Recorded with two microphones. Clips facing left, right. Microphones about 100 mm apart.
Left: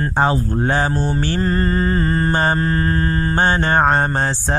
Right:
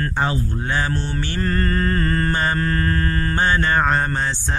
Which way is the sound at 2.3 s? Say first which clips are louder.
Left 3 dB; 30° left (ahead or behind).